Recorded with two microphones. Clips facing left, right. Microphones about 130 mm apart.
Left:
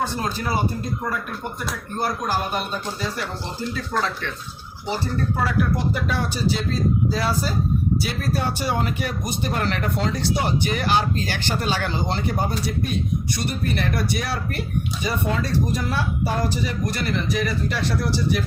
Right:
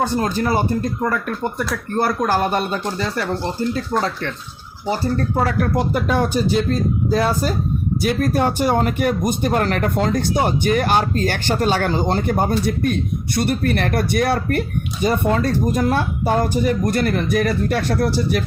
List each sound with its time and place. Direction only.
0.2 s speech: 50° right (ahead or behind); by 2.6 s 75° right (ahead or behind)
3.0 s speech: 60° right (ahead or behind)
5.4 s speech: 50° right (ahead or behind)